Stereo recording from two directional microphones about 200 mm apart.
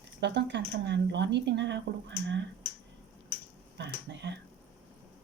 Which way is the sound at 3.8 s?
60° right (ahead or behind).